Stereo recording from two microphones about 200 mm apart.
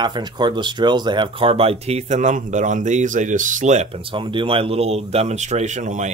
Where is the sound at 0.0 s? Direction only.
20° right (ahead or behind).